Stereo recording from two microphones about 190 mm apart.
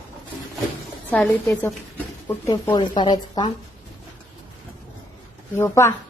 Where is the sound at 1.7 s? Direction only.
10° left (ahead or behind).